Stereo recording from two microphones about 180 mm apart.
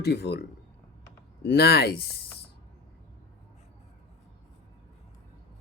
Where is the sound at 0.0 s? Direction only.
65° left (ahead or behind).